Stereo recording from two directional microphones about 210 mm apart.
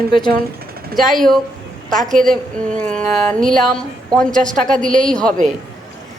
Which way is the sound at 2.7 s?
5° left (ahead or behind).